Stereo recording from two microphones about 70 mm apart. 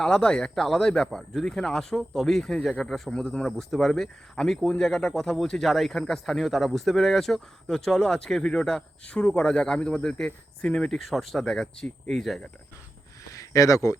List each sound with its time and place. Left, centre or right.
0.0 s speech: centre
13.3 s speech: left